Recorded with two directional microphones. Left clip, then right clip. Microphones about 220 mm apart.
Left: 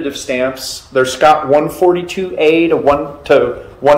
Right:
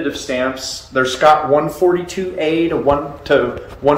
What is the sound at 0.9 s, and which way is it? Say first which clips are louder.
Speech: left 3 dB; 20° left (ahead or behind).